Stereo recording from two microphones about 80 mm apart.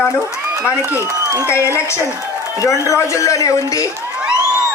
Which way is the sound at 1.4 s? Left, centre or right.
Left.